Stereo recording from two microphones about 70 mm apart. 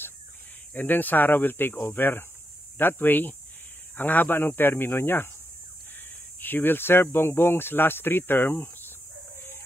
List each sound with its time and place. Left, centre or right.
0.7 s speech: left
6.4 s speech: left